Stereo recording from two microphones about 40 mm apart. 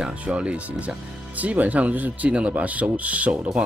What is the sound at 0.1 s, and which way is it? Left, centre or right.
Speech, right.